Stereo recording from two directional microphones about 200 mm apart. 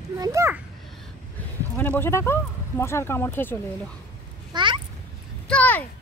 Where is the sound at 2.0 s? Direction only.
15° left (ahead or behind).